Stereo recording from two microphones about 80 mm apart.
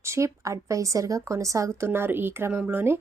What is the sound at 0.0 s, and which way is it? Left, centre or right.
Speech, right.